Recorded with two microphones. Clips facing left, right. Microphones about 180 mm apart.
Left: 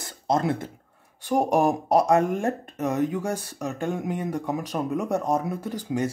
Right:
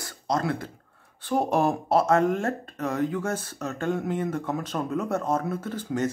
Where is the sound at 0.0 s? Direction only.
20° left (ahead or behind).